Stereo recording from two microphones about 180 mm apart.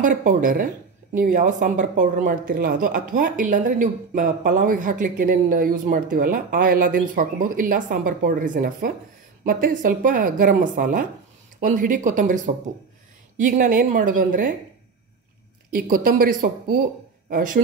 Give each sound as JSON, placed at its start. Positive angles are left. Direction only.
{"t": 0.0, "sound": "a woman's voice", "side_deg": -45}
{"t": 13.5, "sound": "a woman's voice", "side_deg": -45}
{"t": 15.7, "sound": "a woman's voice", "side_deg": -55}